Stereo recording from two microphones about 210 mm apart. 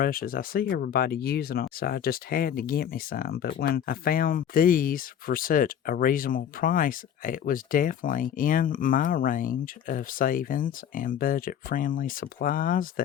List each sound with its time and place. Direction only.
0.0 s speech: 45° left (ahead or behind)